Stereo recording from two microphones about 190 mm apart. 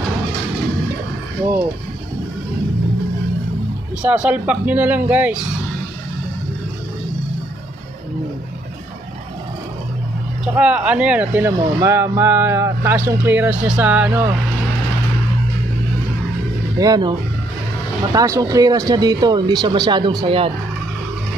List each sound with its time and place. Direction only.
4.0 s speech: 5° right (ahead or behind)
10.4 s speech: 5° right (ahead or behind)
16.7 s speech: 20° right (ahead or behind)
18.1 s speech: 15° right (ahead or behind)